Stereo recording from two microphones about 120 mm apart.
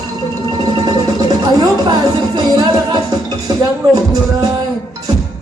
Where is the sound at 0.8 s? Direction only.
35° right (ahead or behind).